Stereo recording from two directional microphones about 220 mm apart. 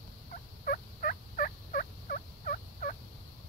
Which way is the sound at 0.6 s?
40° left (ahead or behind).